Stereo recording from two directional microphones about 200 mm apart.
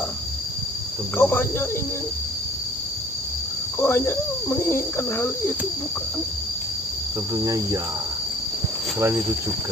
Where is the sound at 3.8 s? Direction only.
10° left (ahead or behind).